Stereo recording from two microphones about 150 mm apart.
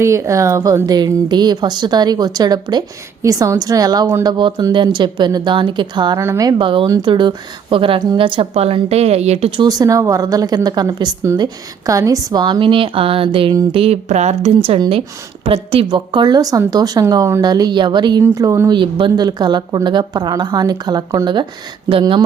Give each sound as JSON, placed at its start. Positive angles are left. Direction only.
{"t": 0.0, "sound": "a woman's voice", "side_deg": -20}
{"t": 6.1, "sound": "a woman's voice", "side_deg": -20}
{"t": 9.6, "sound": "a woman's voice", "side_deg": -25}
{"t": 18.8, "sound": "a woman's voice", "side_deg": -30}